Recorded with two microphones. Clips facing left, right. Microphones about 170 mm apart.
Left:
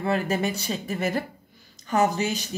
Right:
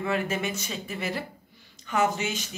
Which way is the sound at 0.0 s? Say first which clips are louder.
Left 3 dB; 35° left (ahead or behind).